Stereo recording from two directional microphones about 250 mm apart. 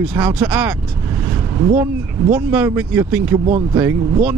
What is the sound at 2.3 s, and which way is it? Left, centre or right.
Speech, centre.